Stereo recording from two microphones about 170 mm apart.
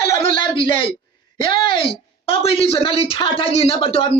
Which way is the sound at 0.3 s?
30° left (ahead or behind).